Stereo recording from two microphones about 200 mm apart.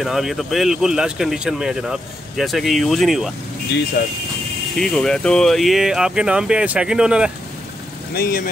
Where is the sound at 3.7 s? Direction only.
55° left (ahead or behind).